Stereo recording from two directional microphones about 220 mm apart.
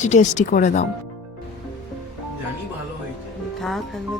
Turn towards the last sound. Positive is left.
turn(degrees=0)  # may be behind; listen again after turning